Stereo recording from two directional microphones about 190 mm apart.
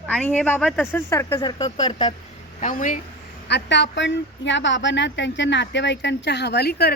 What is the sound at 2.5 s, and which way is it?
Speech, 40° left (ahead or behind).